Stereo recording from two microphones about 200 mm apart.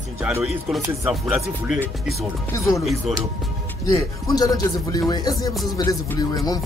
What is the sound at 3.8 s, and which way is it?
Speech, 15° left (ahead or behind).